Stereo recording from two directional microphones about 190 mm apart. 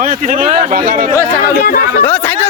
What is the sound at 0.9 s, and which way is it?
Speech, 50° right (ahead or behind).